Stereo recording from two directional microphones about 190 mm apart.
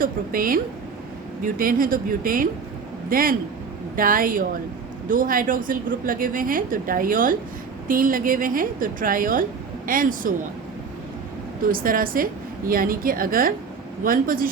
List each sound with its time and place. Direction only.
0.0 s a woman's voice: 50° right (ahead or behind)
11.7 s a woman's voice: 50° right (ahead or behind)